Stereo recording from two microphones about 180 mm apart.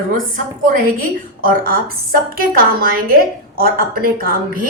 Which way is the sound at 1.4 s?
55° right (ahead or behind).